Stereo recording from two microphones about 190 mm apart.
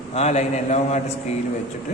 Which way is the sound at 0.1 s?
35° left (ahead or behind).